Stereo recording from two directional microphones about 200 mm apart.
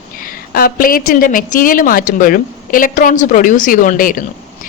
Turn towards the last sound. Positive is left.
turn(degrees=45)  # may be behind; listen again after turning